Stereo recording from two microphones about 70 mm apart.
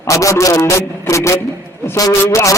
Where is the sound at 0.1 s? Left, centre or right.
Left.